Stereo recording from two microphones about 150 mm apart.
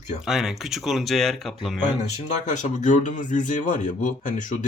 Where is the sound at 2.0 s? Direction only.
50° left (ahead or behind).